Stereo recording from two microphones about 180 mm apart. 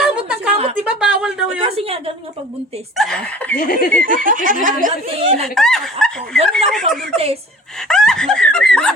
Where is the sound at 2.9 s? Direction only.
Centre (ahead or behind).